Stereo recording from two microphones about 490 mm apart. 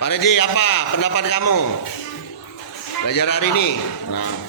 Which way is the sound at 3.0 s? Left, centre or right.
Left.